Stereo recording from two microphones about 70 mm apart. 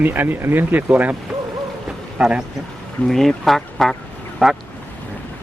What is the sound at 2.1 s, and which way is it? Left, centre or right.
Speech, centre.